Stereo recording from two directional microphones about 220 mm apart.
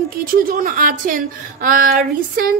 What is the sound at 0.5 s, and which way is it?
A woman's voice, 40° right (ahead or behind).